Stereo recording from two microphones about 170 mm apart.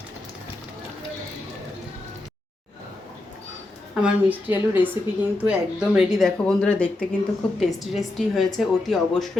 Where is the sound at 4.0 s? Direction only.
10° right (ahead or behind).